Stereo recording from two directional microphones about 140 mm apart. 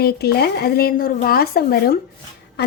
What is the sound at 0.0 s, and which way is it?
Speech, 90° left.